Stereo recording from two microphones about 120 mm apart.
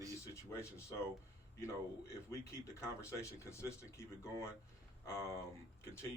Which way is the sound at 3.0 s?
25° left (ahead or behind).